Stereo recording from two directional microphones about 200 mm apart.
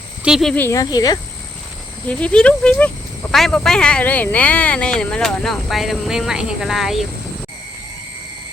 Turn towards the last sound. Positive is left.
turn(degrees=0)  # may be behind; listen again after turning